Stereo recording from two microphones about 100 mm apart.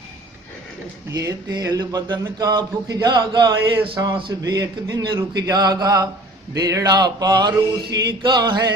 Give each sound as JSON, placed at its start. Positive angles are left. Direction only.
{"t": 1.1, "sound": "speech", "side_deg": -40}
{"t": 3.8, "sound": "speech", "side_deg": -55}
{"t": 7.9, "sound": "a sound", "side_deg": -45}